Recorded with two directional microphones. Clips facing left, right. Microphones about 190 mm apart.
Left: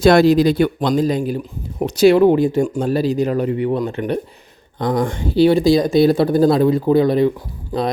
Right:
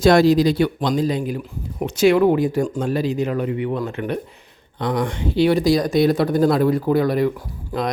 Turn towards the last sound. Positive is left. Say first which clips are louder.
# left 3 dB
turn(degrees=30)  # may be behind; listen again after turning